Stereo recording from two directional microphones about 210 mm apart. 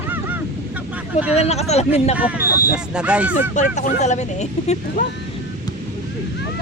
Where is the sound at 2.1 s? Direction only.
5° right (ahead or behind).